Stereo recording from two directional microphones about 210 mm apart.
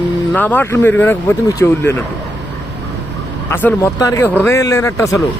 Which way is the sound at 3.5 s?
10° left (ahead or behind).